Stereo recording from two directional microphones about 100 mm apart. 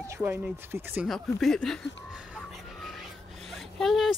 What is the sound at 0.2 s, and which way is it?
Speech, 20° right (ahead or behind).